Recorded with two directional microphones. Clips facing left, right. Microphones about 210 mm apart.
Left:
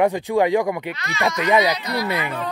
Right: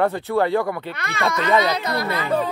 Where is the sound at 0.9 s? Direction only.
55° right (ahead or behind).